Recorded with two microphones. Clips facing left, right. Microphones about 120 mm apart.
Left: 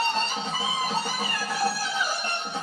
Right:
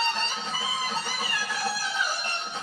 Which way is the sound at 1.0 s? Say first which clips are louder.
Left 3 dB; 50° left (ahead or behind).